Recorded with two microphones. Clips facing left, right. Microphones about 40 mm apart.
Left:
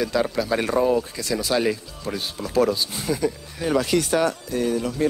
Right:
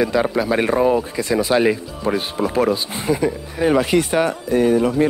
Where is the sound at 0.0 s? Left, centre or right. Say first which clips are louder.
Right 5 dB; right.